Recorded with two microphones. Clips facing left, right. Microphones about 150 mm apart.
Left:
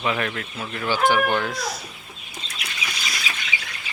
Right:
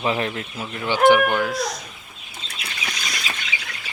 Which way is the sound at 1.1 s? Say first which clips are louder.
Right 4 dB; 10° right (ahead or behind).